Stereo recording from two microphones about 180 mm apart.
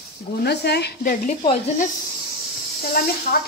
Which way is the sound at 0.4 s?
65° left (ahead or behind).